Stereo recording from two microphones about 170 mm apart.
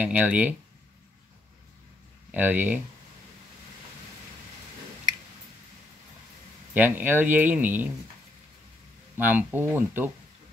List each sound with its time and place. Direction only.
0.0 s speech: 10° right (ahead or behind)
2.3 s speech: 10° right (ahead or behind)
6.7 s speech: 10° right (ahead or behind)
9.1 s speech: 10° right (ahead or behind)